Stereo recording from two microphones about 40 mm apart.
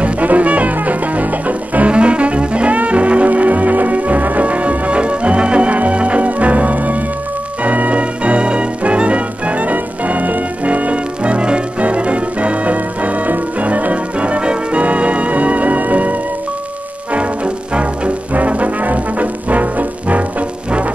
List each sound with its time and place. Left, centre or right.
0.0 s music: right
1.9 s brass instrument: right
7.6 s music: right
18.3 s brass instrument: right